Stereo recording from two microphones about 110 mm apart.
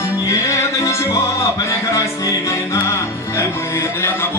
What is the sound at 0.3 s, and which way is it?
Music, 25° left (ahead or behind).